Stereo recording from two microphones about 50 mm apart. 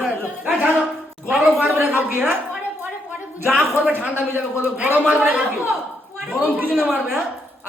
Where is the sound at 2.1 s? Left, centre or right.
Right.